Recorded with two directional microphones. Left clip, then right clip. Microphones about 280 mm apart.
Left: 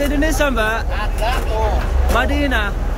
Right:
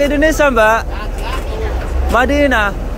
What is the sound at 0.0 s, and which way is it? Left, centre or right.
Speech, centre.